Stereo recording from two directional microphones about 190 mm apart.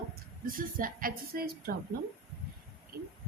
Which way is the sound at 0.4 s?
45° right (ahead or behind).